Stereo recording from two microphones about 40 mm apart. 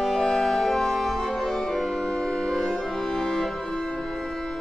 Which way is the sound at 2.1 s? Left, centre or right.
Centre.